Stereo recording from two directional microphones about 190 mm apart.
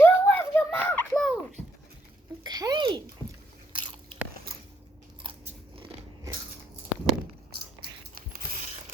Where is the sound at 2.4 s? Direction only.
20° right (ahead or behind).